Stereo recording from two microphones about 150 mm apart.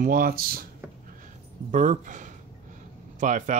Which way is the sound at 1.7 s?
55° right (ahead or behind).